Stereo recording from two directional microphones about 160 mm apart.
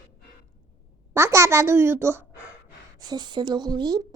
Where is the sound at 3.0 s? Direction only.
25° right (ahead or behind).